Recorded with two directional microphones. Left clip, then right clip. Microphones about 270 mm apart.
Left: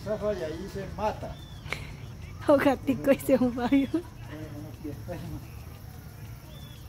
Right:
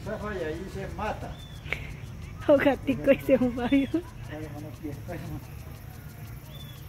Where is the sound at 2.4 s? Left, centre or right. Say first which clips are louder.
Right 1 dB; centre.